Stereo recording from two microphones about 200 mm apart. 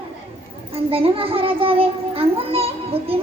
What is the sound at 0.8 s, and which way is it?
A child's voice, 30° right (ahead or behind).